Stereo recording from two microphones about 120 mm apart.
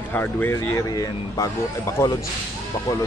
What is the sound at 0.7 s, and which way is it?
Speech, 30° left (ahead or behind).